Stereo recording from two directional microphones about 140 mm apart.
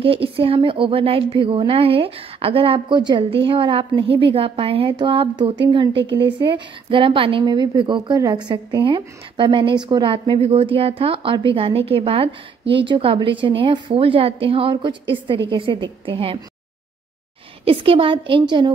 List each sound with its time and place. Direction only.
0.0 s a woman's voice: 40° right (ahead or behind)
17.6 s a woman's voice: 40° right (ahead or behind)